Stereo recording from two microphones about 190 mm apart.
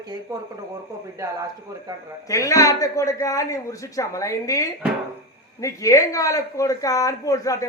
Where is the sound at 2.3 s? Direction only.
15° left (ahead or behind).